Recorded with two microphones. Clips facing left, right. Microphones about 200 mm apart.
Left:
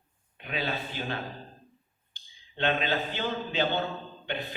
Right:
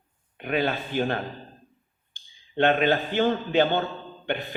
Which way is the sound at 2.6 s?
55° right (ahead or behind).